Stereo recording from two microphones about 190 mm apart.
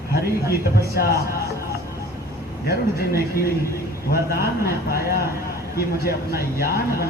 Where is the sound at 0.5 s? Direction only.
55° left (ahead or behind).